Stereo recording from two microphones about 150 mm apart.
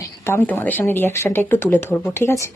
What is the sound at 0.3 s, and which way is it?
Speech, 15° left (ahead or behind).